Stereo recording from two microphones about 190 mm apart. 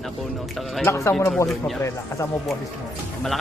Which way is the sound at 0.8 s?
15° left (ahead or behind).